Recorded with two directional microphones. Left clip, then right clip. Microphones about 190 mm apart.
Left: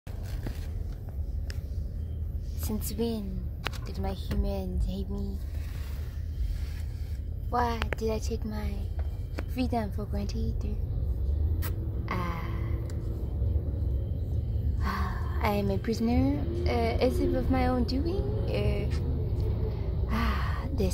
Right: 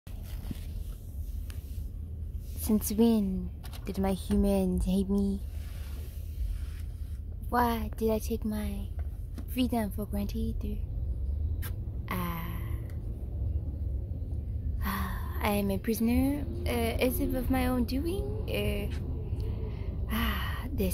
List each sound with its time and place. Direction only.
2.6 s speech: 40° right (ahead or behind)
7.4 s a woman's voice: 35° right (ahead or behind)
12.1 s a sound: 15° right (ahead or behind)
14.8 s a woman's voice: 15° right (ahead or behind)
20.1 s gasp: 10° right (ahead or behind)